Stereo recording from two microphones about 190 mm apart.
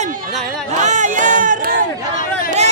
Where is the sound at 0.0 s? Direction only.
45° right (ahead or behind).